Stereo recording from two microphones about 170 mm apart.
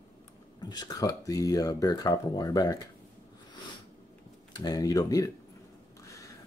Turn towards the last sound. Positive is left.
turn(degrees=20)  # may be behind; listen again after turning